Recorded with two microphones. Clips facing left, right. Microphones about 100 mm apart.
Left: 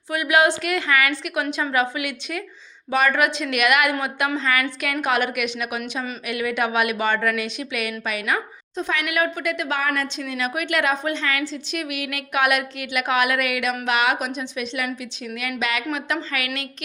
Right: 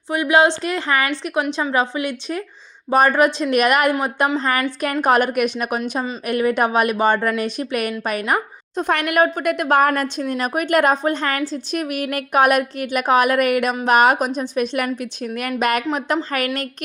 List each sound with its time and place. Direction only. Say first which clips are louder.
0.1 s a woman's voice: right 3 dB; 25° right (ahead or behind)
3.9 s a woman's voice: right 4 dB; 30° right (ahead or behind); by 15.8 s 50° right (ahead or behind)
15.9 s a woman's voice: right 5 dB; 40° right (ahead or behind)